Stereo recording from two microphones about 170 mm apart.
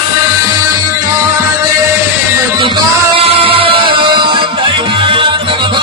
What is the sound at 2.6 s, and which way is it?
Music, 30° right (ahead or behind).